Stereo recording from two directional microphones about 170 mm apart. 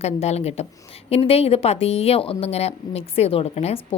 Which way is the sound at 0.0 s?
40° left (ahead or behind).